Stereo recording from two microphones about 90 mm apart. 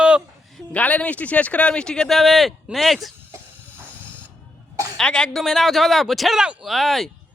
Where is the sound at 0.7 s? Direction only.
15° left (ahead or behind); by 3.1 s centre (ahead or behind).